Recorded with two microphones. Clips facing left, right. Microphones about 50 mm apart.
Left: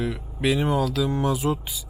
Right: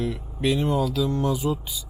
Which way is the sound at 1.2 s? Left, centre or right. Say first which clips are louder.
Left 1 dB; centre.